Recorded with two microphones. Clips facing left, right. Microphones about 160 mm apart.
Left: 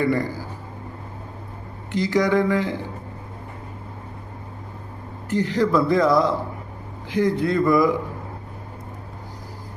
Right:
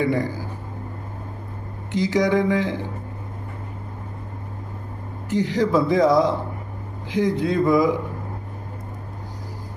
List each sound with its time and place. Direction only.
0.0 s speech: 15° right (ahead or behind)
1.9 s speech: 15° right (ahead or behind)
5.3 s speech: 15° right (ahead or behind)